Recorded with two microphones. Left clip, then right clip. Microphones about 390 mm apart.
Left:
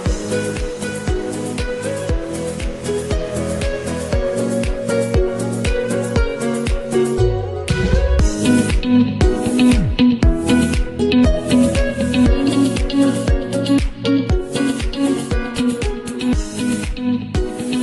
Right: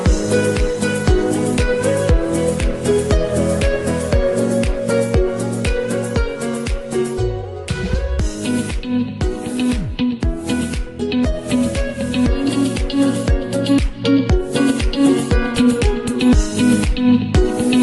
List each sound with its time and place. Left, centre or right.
0.3 s music: right
1.0 s music: right
2.8 s music: right; by 5.3 s centre
5.7 s music: centre
6.4 s music: left
8.4 s music: left; by 13.1 s centre
13.5 s music: centre; by 15.7 s right
16.2 s music: right